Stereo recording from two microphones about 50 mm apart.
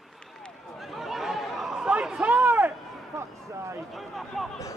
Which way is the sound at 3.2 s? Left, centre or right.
Right.